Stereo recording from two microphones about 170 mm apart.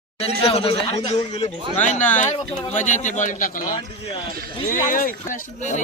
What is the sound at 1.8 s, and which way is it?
Speech, 45° left (ahead or behind).